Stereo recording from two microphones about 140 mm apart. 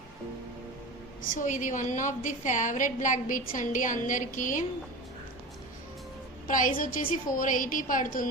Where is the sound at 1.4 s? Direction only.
65° left (ahead or behind).